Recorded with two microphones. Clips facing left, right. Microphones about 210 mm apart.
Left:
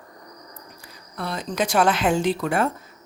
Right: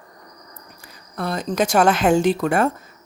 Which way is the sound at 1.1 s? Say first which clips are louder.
Right 4 dB; 45° right (ahead or behind).